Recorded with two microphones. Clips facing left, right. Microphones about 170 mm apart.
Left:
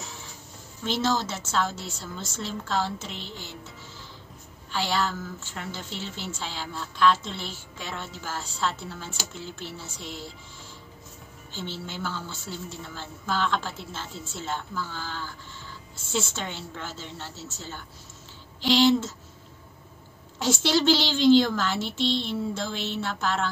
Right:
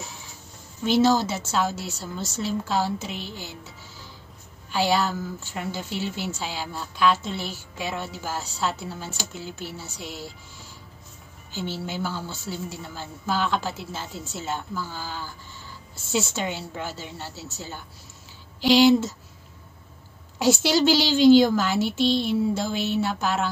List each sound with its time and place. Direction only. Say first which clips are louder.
0.8 s a woman's voice: right 7 dB; 10° right (ahead or behind)
4.6 s a woman's voice: right 5 dB; 5° right (ahead or behind)
11.5 s a woman's voice: right 5 dB; 5° right (ahead or behind)
20.3 s a woman's voice: right 3 dB; 5° right (ahead or behind)